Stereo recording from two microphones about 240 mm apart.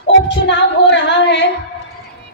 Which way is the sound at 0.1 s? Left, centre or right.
Left.